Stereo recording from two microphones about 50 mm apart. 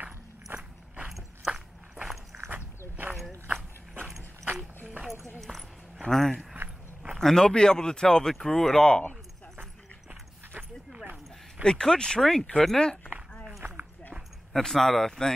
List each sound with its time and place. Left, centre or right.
0.5 s biting: right
1.0 s a sound: centre
2.3 s walk: centre
6.0 s speech: centre
11.6 s speech: centre
14.5 s speech: centre